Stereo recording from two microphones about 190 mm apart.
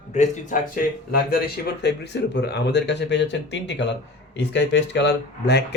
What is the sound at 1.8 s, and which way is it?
Speech, 60° left (ahead or behind).